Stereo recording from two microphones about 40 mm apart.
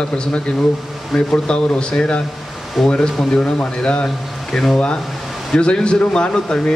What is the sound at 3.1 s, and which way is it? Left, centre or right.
Speech, centre.